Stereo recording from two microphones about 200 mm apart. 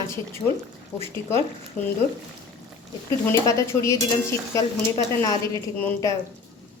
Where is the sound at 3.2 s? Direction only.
15° left (ahead or behind).